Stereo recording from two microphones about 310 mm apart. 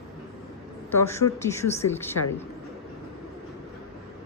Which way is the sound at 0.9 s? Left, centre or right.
Centre.